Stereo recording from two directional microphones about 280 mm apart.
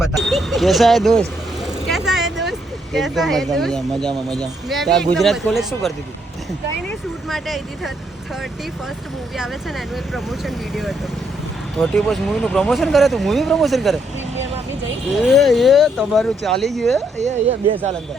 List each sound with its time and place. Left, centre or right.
0.0 s a sound: centre
1.6 s vehicle: centre
2.4 s speech: centre
7.3 s speech: centre
9.3 s speech: centre
15.3 s speech: centre
17.2 s speech: right